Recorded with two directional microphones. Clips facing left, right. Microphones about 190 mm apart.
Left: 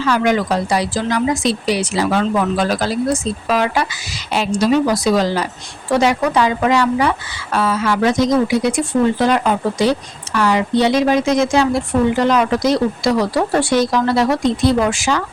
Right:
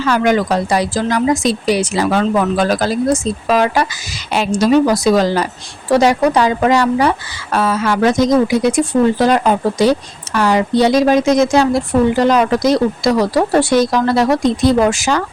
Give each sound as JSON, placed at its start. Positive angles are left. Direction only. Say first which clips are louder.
{"t": 0.1, "sound": "speech", "louder": "right 2 dB", "side_deg": -45}